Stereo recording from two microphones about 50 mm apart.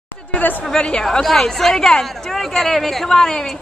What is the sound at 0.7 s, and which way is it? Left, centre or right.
Speech, centre.